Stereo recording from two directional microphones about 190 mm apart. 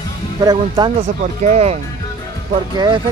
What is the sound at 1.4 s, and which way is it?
Speech, 35° right (ahead or behind).